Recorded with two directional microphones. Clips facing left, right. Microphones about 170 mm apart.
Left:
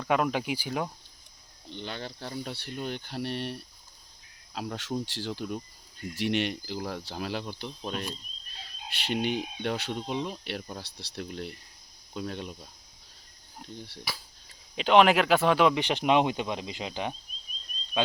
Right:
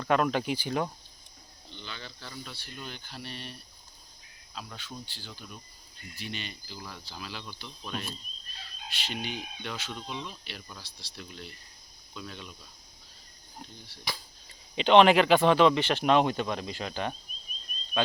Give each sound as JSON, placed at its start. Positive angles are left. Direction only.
{"t": 0.0, "sound": "speech", "side_deg": 10}
{"t": 1.7, "sound": "speech", "side_deg": 60}
{"t": 8.9, "sound": "speech", "side_deg": 60}
{"t": 14.1, "sound": "speech", "side_deg": 5}